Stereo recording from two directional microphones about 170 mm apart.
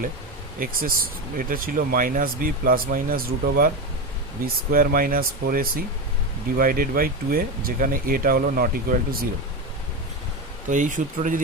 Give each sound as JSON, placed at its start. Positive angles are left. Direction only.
{"t": 0.6, "sound": "speech", "side_deg": -55}
{"t": 10.7, "sound": "speech", "side_deg": -50}